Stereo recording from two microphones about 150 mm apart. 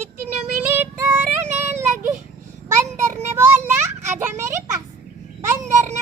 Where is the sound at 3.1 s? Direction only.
50° right (ahead or behind).